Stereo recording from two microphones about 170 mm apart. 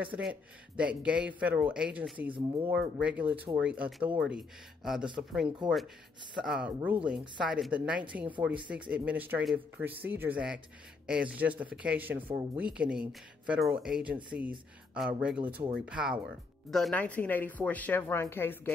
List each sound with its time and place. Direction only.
0.0 s speech: 10° right (ahead or behind)
16.7 s a woman's voice: 5° left (ahead or behind)